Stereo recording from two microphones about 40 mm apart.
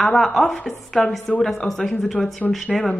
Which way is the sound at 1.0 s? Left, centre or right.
Left.